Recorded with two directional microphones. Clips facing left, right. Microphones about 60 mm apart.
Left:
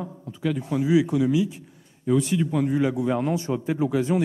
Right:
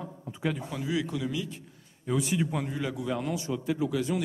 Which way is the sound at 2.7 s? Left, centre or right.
Left.